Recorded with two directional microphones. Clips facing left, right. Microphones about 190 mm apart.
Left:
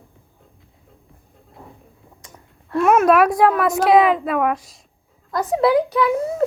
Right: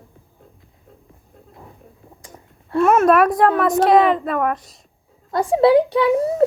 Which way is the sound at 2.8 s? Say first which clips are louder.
Even; centre (ahead or behind).